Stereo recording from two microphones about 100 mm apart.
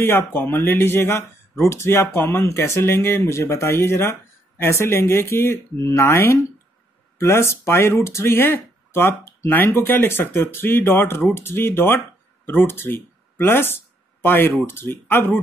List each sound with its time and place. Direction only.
0.0 s speech: 20° left (ahead or behind)